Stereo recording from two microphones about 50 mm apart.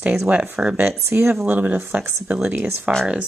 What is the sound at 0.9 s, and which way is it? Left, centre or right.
Speech, right.